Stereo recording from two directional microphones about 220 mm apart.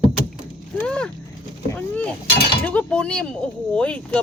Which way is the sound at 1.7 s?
5° left (ahead or behind).